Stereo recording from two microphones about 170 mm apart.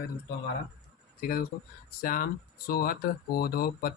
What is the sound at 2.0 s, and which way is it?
Speech, 60° left (ahead or behind).